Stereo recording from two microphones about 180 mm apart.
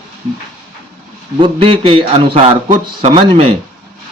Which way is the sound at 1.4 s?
30° right (ahead or behind).